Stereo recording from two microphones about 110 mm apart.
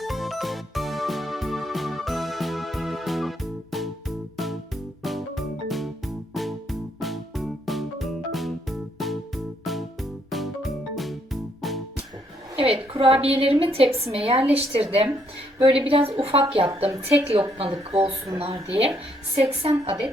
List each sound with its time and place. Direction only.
0.0 s music: centre (ahead or behind)
12.5 s a woman's voice: 60° right (ahead or behind)